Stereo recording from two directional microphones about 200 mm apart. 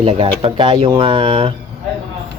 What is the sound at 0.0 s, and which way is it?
Speech, 25° right (ahead or behind).